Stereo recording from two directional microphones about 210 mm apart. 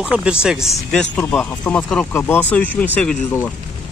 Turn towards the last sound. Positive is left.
turn(degrees=5)  # may be behind; listen again after turning